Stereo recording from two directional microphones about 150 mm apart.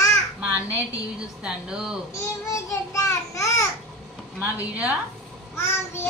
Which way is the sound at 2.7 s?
20° left (ahead or behind).